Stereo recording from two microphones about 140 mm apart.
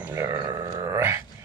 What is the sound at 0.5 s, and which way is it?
Grunt, 20° right (ahead or behind).